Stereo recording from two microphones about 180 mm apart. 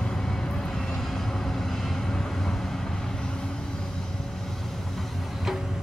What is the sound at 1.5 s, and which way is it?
Vehicle, centre (ahead or behind).